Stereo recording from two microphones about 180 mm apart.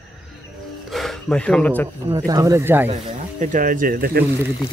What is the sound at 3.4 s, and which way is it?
Speech, 45° right (ahead or behind).